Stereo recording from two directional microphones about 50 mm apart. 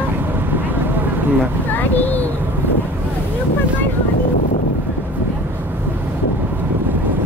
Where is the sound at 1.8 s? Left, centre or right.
Left.